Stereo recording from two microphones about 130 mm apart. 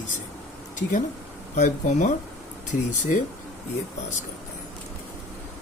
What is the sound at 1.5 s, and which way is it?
Speech, 70° left (ahead or behind).